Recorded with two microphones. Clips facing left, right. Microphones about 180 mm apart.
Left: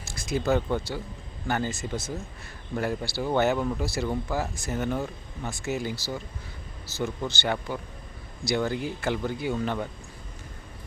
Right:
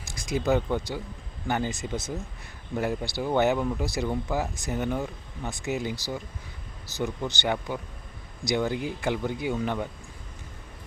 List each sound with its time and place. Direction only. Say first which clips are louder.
0.0 s speech: even; 15° right (ahead or behind)